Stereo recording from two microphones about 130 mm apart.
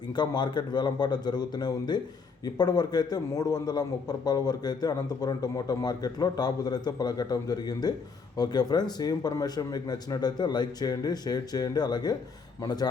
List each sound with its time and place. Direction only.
0.2 s a man's voice: 35° left (ahead or behind)